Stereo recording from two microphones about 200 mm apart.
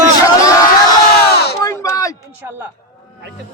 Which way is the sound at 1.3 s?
55° left (ahead or behind).